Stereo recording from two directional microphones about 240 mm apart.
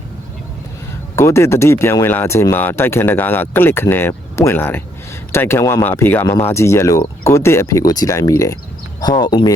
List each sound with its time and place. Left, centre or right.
1.1 s speech: centre